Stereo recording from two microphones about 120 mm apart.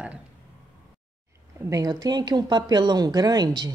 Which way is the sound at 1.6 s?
30° right (ahead or behind).